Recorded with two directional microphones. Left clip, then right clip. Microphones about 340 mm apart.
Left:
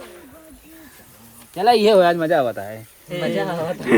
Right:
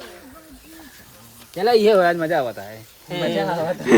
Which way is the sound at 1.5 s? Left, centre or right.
Left.